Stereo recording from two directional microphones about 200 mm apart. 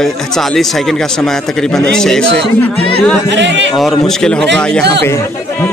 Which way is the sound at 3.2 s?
65° right (ahead or behind).